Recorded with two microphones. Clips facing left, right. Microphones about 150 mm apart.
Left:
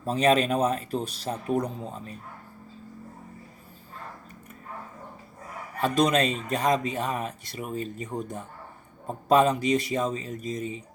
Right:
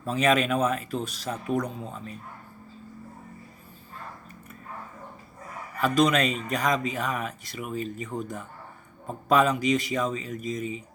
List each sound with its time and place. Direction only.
0.0 s speech: 35° left (ahead or behind)
5.8 s speech: 30° left (ahead or behind)